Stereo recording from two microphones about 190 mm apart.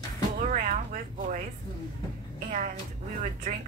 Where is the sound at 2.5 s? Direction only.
40° right (ahead or behind).